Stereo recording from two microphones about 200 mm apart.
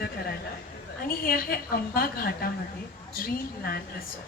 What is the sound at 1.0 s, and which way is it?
A woman's voice, 45° left (ahead or behind).